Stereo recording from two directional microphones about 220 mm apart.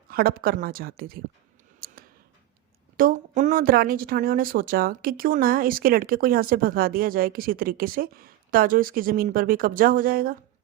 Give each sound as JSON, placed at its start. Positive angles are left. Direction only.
{"t": 0.1, "sound": "speech", "side_deg": -40}
{"t": 1.8, "sound": "a sound", "side_deg": -40}
{"t": 3.0, "sound": "speech", "side_deg": -35}